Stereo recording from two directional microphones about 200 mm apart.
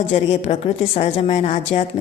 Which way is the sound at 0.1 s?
35° left (ahead or behind).